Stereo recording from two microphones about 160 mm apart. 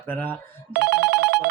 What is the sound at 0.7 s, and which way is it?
Telephone bell ringing, 80° right.